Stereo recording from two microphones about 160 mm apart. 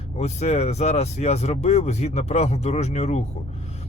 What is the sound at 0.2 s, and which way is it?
Speech, 45° left (ahead or behind).